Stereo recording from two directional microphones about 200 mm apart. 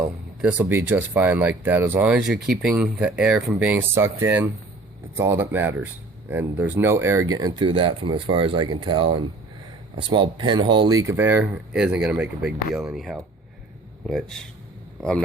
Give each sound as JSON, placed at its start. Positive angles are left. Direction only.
{"t": 0.5, "sound": "speech", "side_deg": -10}